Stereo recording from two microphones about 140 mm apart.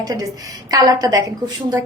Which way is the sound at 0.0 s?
25° right (ahead or behind).